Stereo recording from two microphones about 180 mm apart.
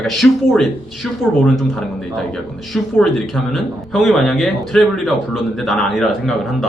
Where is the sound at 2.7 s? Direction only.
Centre (ahead or behind).